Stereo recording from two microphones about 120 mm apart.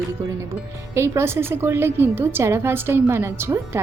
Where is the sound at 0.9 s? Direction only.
25° right (ahead or behind).